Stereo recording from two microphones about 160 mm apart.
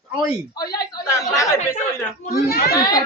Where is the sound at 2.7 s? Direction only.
20° left (ahead or behind).